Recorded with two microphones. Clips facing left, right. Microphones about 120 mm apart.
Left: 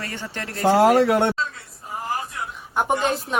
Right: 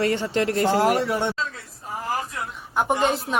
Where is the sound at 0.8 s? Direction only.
85° left.